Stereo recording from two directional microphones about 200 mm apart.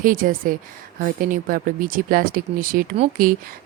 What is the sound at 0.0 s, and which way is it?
Speech, 45° right (ahead or behind).